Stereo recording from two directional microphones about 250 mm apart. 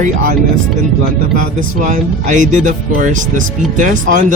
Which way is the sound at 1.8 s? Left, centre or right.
Right.